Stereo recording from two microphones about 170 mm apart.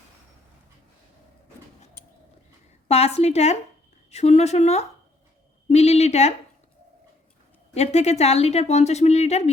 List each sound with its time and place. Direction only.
2.8 s a woman's voice: 35° left (ahead or behind)
7.7 s speech: 40° left (ahead or behind)